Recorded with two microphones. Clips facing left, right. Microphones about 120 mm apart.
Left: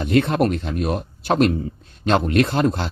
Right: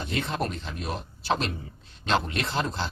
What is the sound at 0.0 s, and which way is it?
Speech, 60° left (ahead or behind).